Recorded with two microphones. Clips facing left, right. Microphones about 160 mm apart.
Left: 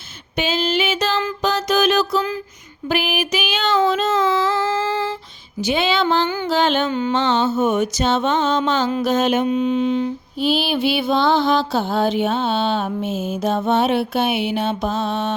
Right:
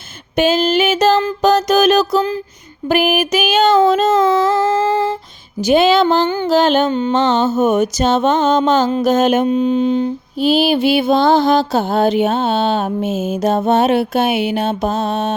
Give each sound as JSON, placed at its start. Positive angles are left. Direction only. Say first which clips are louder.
{"t": 0.3, "sound": "a sound", "louder": "right 7 dB", "side_deg": -50}
{"t": 1.4, "sound": "music", "louder": "right 6 dB", "side_deg": -45}
{"t": 2.9, "sound": "mantra", "louder": "right 7 dB", "side_deg": -45}